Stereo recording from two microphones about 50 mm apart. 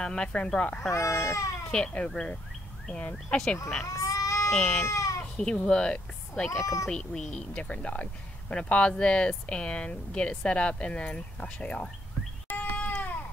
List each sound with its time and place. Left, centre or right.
0.0 s speech: left
0.7 s speech: left
1.7 s speech: centre
3.8 s sheep: left
4.5 s speech: centre
4.8 s goat: left
5.4 s speech: centre
6.5 s speech: left
6.9 s speech: centre
12.4 s cat: left